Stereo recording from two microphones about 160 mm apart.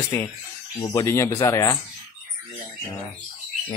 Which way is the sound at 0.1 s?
20° left (ahead or behind).